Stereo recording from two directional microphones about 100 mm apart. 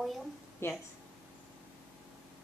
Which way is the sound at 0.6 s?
25° left (ahead or behind).